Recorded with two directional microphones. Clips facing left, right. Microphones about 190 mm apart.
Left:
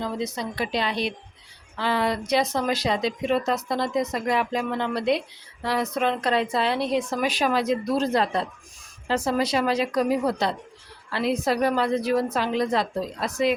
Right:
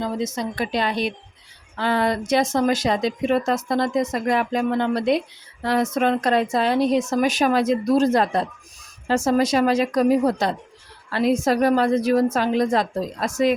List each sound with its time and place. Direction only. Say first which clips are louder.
0.0 s speech: right 3 dB; 45° right (ahead or behind)